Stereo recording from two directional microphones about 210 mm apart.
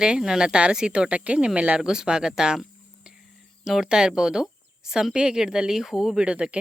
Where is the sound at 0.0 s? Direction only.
5° right (ahead or behind).